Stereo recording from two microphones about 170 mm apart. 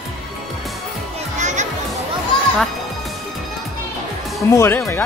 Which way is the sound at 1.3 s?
45° right (ahead or behind).